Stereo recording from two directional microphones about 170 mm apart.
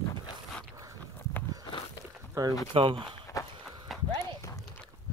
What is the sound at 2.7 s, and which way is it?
Speech, 30° right (ahead or behind).